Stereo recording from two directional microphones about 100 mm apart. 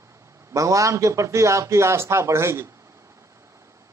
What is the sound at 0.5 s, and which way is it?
A man's voice, 30° right (ahead or behind).